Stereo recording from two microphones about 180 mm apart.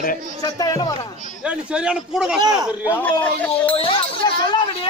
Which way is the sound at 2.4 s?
20° right (ahead or behind).